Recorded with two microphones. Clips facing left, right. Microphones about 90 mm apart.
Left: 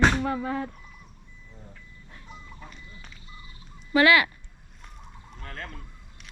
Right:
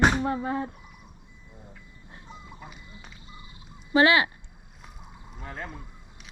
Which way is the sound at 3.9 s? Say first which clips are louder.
Even; 25° right (ahead or behind).